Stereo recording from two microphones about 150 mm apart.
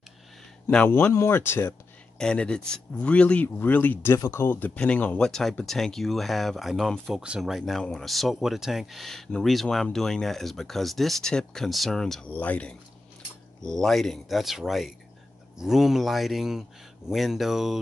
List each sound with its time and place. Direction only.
0.7 s speech: 10° left (ahead or behind)
2.1 s speech: 5° left (ahead or behind)